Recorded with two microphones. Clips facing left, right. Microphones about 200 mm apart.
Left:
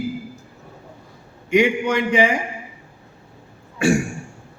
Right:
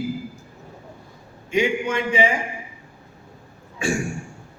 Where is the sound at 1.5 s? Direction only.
70° left (ahead or behind).